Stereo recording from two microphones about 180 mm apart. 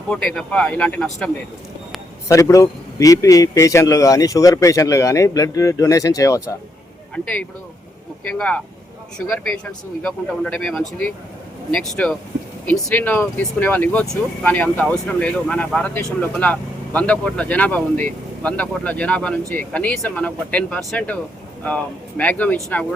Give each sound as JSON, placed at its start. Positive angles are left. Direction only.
{"t": 0.1, "sound": "speech", "side_deg": 5}
{"t": 2.2, "sound": "speech", "side_deg": 15}
{"t": 8.3, "sound": "speech", "side_deg": 5}
{"t": 10.0, "sound": "speech", "side_deg": 5}